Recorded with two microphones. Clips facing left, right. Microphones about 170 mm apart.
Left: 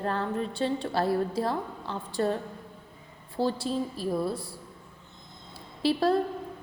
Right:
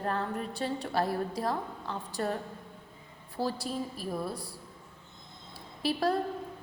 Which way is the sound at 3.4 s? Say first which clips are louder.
Left 5 dB; 25° left (ahead or behind).